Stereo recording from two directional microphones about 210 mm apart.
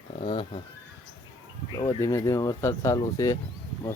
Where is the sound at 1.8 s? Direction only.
20° left (ahead or behind).